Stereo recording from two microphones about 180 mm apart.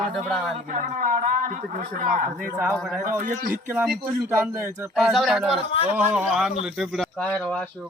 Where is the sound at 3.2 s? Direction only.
50° right (ahead or behind).